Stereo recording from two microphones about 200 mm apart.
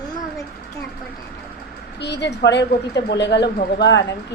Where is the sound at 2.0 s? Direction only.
60° left (ahead or behind).